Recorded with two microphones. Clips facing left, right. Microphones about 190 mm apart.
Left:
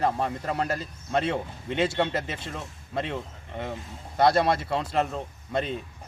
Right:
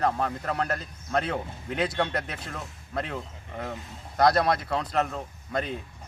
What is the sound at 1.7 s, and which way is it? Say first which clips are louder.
Speech: left 2 dB; 25° left (ahead or behind).